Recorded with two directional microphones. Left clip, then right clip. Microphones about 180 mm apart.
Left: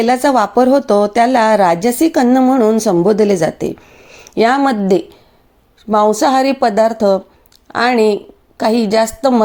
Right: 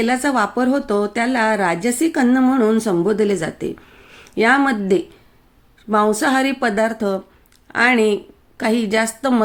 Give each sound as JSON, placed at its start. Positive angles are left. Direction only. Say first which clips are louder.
{"t": 0.0, "sound": "a woman's voice", "louder": "left 6 dB", "side_deg": 30}